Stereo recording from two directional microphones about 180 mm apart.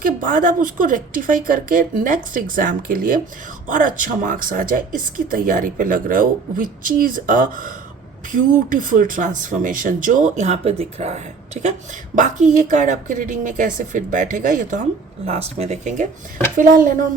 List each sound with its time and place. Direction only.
0.0 s speech: 50° right (ahead or behind)